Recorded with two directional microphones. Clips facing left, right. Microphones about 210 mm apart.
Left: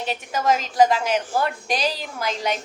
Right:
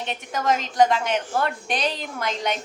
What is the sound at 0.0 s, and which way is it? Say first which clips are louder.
A woman's voice: left 2 dB; 5° left (ahead or behind).